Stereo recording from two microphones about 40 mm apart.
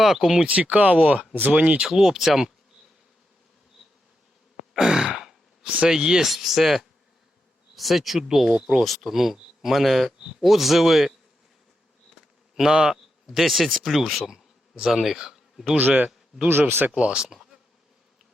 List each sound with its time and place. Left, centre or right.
0.0 s speech: centre
0.3 s speech: right
1.9 s speech: centre
4.5 s sigh: centre
5.6 s speech: right
5.9 s speech: centre
6.2 s speech: centre
12.1 s bee: centre
13.2 s speech: centre
15.8 s speech: right
16.5 s speech: right
16.9 s speech: right
17.2 s insect: centre